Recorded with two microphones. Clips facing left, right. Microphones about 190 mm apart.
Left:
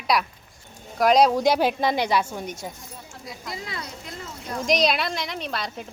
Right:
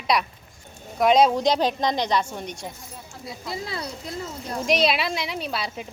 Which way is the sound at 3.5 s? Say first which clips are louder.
Right 4 dB; 30° right (ahead or behind).